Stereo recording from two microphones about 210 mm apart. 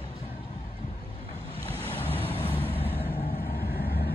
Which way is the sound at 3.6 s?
45° left (ahead or behind).